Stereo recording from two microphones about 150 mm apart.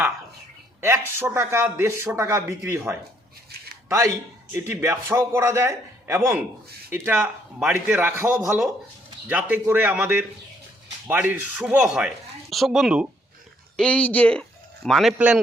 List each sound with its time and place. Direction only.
0.8 s speech: 15° right (ahead or behind)
9.3 s speech: 10° right (ahead or behind)
13.7 s a man's voice: 10° left (ahead or behind)